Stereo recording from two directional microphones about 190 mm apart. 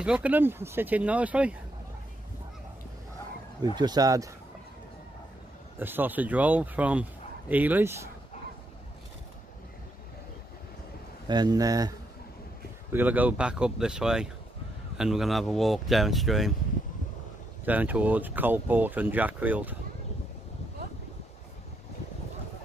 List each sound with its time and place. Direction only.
0.0 s a man's voice: 5° right (ahead or behind)
3.7 s speech: 20° right (ahead or behind)
5.8 s a man's voice: 10° right (ahead or behind)
11.2 s speech: 20° right (ahead or behind)
12.9 s speech: 10° right (ahead or behind)
17.6 s a man's voice: 10° right (ahead or behind)